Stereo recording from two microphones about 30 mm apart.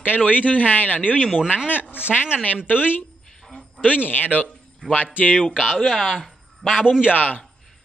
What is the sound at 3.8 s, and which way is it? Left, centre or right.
Speech, left.